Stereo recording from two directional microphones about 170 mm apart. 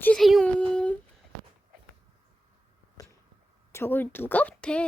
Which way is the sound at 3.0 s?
20° left (ahead or behind).